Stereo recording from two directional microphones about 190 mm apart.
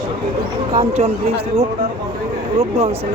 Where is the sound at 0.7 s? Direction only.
30° right (ahead or behind).